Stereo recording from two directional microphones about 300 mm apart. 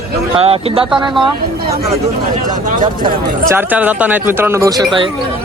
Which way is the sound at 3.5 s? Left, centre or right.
Centre.